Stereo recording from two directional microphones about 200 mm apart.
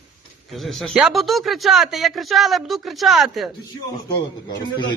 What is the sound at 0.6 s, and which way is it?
Speech, centre (ahead or behind).